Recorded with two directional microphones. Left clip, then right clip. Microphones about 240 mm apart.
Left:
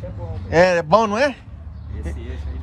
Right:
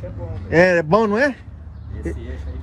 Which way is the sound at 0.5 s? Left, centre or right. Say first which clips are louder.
Even; left.